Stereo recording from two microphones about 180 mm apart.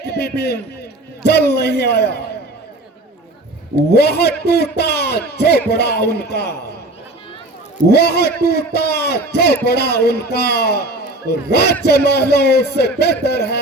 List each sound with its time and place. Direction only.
0.0 s a man's voice: 65° left (ahead or behind)
3.9 s a man's voice: 65° left (ahead or behind)
7.9 s a man's voice: 65° left (ahead or behind)